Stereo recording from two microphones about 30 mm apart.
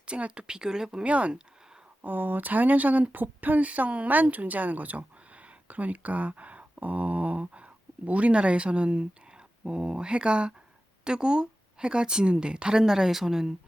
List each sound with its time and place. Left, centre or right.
0.2 s speech: right
1.0 s speech: right
2.0 s speech: right
3.1 s a woman's voice: right
12.7 s speech: centre